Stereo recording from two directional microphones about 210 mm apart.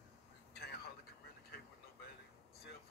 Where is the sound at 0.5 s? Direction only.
50° left (ahead or behind).